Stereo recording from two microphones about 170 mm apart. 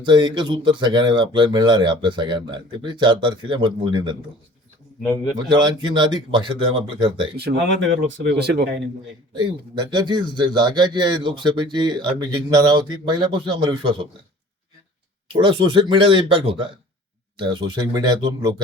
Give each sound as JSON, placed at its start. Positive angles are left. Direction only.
{"t": 0.0, "sound": "a man's voice", "side_deg": -25}
{"t": 5.5, "sound": "a man's voice", "side_deg": -25}
{"t": 7.3, "sound": "speech", "side_deg": -70}
{"t": 7.8, "sound": "speech", "side_deg": -90}
{"t": 9.3, "sound": "a man's voice", "side_deg": -25}
{"t": 15.3, "sound": "a man's voice", "side_deg": -30}